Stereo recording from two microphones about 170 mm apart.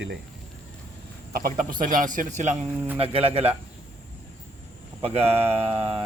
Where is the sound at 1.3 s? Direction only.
55° right (ahead or behind).